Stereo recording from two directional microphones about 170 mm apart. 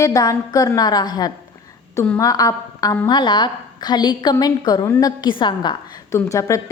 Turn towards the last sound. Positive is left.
turn(degrees=20)  # may be behind; listen again after turning